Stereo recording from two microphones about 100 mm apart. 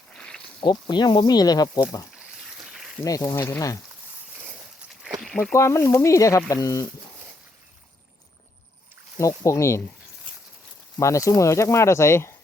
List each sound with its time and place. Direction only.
0.1 s snake: 5° left (ahead or behind)
0.6 s speech: 45° left (ahead or behind)
2.6 s a sound: 5° right (ahead or behind)
3.0 s speech: 35° left (ahead or behind)
5.2 s a sound: 5° left (ahead or behind)
5.5 s speech: 30° left (ahead or behind)
9.1 s speech: 30° left (ahead or behind)
11.0 s speech: 30° left (ahead or behind)